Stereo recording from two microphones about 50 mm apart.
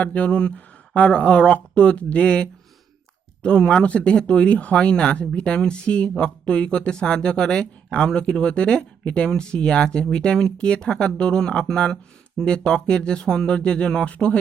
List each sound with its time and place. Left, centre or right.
0.0 s speech: left